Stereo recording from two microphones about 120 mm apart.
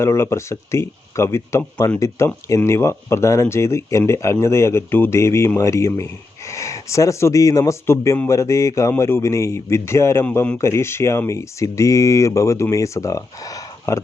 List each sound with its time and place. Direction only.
0.0 s speech: 20° left (ahead or behind)